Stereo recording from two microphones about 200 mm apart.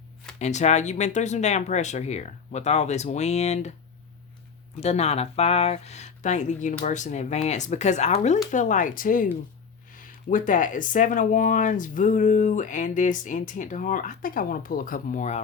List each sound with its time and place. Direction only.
0.3 s speech: 35° left (ahead or behind)
4.8 s speech: 30° left (ahead or behind)